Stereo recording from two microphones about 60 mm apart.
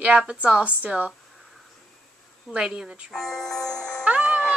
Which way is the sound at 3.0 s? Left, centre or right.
Centre.